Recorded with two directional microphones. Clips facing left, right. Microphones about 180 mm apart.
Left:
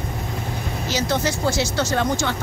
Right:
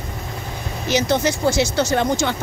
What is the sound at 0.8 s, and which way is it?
Speech, 20° right (ahead or behind).